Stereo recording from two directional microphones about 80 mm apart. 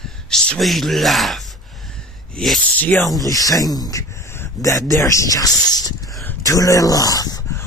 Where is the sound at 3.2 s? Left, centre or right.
Left.